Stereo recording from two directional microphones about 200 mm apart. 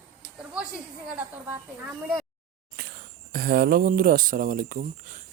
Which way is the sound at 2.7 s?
50° right (ahead or behind).